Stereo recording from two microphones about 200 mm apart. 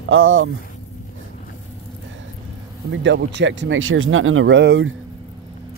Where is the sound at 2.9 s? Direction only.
65° right (ahead or behind).